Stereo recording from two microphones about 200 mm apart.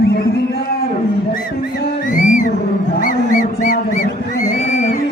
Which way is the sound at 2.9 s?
40° left (ahead or behind).